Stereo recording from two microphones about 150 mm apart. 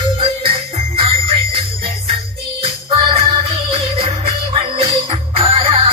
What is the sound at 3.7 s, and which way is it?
Music, 40° right (ahead or behind).